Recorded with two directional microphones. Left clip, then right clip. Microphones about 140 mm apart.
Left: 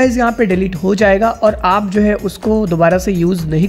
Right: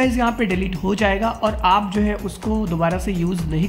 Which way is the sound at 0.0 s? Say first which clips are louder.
Left 7 dB; 40° left (ahead or behind).